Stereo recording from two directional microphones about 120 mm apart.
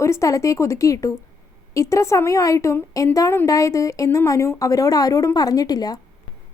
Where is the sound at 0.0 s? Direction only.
25° left (ahead or behind).